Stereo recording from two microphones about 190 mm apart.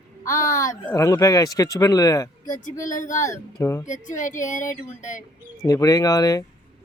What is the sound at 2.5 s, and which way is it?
Speech, 40° left (ahead or behind).